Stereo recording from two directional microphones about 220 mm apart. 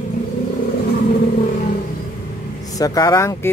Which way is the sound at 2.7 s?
15° left (ahead or behind).